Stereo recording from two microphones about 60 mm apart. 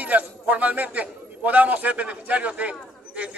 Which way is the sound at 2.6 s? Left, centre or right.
Right.